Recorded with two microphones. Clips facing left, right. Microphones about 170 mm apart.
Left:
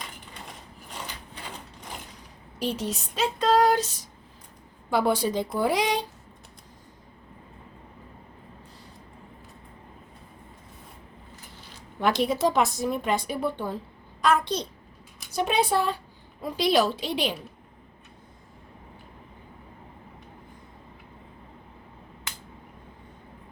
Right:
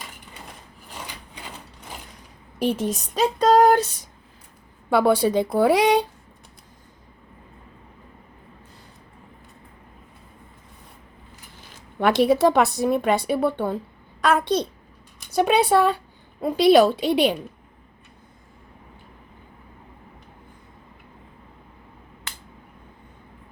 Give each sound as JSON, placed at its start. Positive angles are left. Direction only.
{"t": 2.6, "sound": "a woman's voice", "side_deg": -55}
{"t": 3.3, "sound": "a sound", "side_deg": -45}
{"t": 4.9, "sound": "a woman's voice", "side_deg": -60}
{"t": 11.7, "sound": "a woman's voice", "side_deg": -65}